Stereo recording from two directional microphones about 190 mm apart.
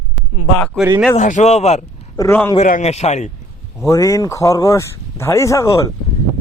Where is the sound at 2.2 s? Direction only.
15° left (ahead or behind).